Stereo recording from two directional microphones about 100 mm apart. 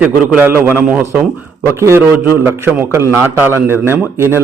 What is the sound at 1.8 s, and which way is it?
A man's voice, 30° right (ahead or behind).